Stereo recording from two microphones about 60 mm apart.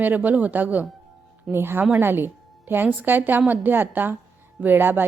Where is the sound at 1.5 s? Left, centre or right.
Right.